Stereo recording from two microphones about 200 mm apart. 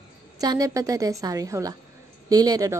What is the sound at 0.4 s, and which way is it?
A woman's voice, 20° right (ahead or behind).